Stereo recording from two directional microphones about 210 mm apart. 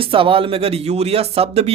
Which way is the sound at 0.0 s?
25° right (ahead or behind).